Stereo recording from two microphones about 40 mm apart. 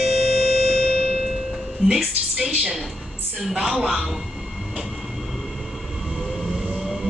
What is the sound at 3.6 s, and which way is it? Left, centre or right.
Speech, centre.